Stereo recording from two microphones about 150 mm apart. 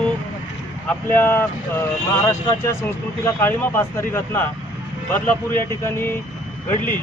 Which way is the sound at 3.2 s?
15° left (ahead or behind).